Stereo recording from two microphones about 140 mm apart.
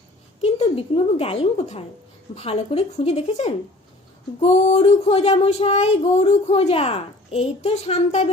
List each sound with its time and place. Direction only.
0.4 s a woman's voice: 45° left (ahead or behind)
2.3 s child singing: 45° left (ahead or behind)